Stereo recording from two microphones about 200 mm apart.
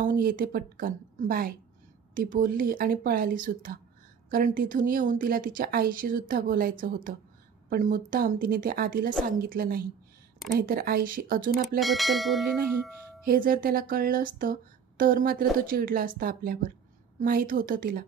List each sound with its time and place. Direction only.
0.0 s speech: 45° right (ahead or behind)
11.8 s speech: centre (ahead or behind)
13.2 s speech: 45° right (ahead or behind)